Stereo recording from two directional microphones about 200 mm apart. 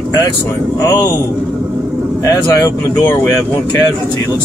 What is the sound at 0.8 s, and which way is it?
Speech, 20° left (ahead or behind).